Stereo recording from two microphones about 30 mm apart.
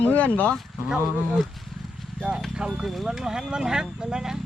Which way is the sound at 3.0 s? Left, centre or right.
Right.